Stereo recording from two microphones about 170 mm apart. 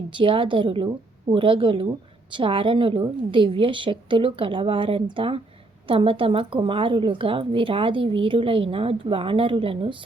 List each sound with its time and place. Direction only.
0.1 s a woman's voice: 30° right (ahead or behind)